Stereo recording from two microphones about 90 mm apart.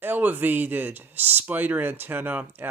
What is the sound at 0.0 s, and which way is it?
Speech, 20° right (ahead or behind).